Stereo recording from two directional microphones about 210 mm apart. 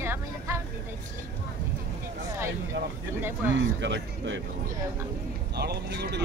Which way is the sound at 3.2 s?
10° right (ahead or behind).